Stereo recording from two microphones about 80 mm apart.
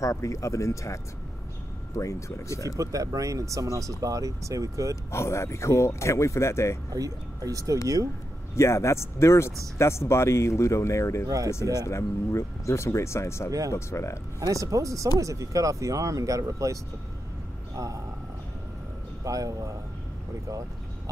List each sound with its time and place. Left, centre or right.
0.0 s speech: left
2.0 s speech: left
2.8 s speech: right
5.1 s speech: left
6.9 s speech: right
8.5 s speech: left
11.2 s speech: right
11.9 s speech: left
14.4 s speech: right
17.7 s speech: right
19.2 s speech: right